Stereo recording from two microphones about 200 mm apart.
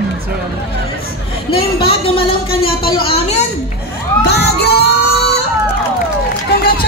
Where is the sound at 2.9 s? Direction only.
25° left (ahead or behind).